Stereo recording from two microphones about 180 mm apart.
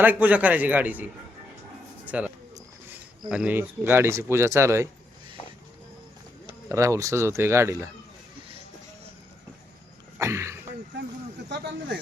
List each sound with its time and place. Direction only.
0.0 s speech: 10° right (ahead or behind)
6.7 s speech: 15° right (ahead or behind)
10.2 s speech: 15° right (ahead or behind)
11.4 s speech: 65° right (ahead or behind)